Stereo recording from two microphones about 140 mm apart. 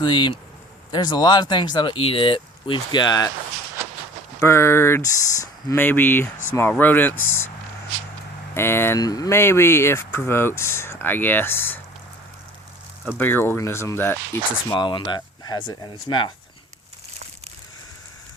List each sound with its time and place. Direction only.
0.0 s speech: 30° left (ahead or behind)
3.8 s a sound: 20° right (ahead or behind)
4.4 s speech: 20° left (ahead or behind)
8.5 s speech: 15° left (ahead or behind)
13.1 s speech: 15° left (ahead or behind)
14.7 s speech: 30° left (ahead or behind)